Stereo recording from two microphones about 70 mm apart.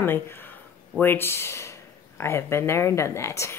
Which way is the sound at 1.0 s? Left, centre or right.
Left.